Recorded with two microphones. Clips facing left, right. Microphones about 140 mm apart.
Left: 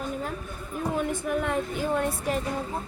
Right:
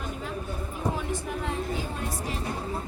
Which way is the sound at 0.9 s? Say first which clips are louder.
Left 5 dB; 55° left (ahead or behind).